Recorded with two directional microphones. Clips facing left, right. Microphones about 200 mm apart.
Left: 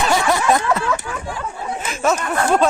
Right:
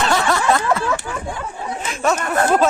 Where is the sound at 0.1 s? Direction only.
15° left (ahead or behind).